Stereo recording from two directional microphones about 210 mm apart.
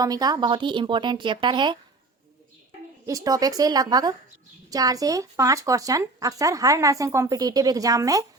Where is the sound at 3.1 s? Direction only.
15° right (ahead or behind).